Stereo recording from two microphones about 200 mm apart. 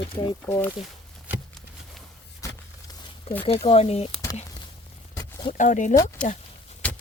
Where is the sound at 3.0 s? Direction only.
30° left (ahead or behind).